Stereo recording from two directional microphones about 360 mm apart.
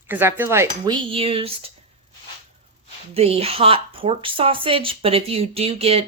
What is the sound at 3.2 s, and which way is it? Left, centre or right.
Speech, centre.